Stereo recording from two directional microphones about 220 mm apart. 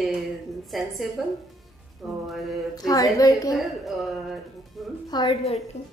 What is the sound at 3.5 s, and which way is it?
A woman's voice, centre (ahead or behind).